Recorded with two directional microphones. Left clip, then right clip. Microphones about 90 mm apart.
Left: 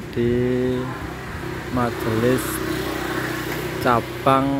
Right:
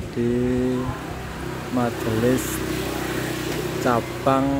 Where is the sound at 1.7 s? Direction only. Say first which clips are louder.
Left 1 dB; 30° left (ahead or behind).